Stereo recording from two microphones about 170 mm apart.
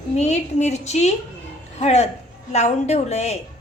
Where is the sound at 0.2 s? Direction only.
40° left (ahead or behind).